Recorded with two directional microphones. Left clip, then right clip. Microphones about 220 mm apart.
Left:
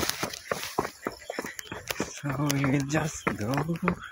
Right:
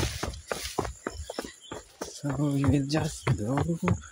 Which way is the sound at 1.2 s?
20° left (ahead or behind).